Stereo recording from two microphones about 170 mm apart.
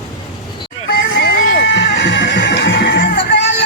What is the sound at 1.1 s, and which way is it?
Music, 90° left.